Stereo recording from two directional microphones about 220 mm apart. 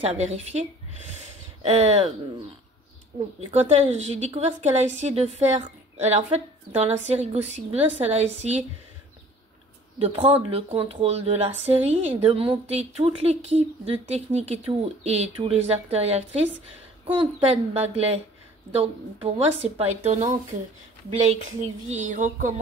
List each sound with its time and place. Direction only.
0.0 s a woman's voice: 30° right (ahead or behind)
3.4 s a woman's voice: 30° right (ahead or behind)
9.9 s a woman's voice: 25° right (ahead or behind)